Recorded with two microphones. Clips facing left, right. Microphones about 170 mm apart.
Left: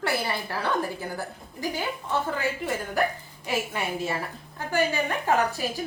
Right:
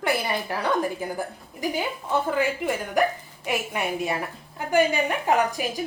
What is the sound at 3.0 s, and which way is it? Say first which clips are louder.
A woman's voice: right 5 dB; 15° right (ahead or behind).